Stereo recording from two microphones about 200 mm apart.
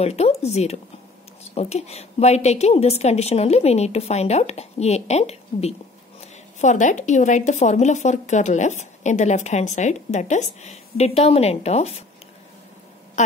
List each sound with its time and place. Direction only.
0.0 s speech: 30° left (ahead or behind)